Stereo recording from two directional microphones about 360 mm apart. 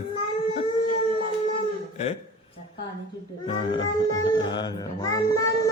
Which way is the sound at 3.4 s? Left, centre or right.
Centre.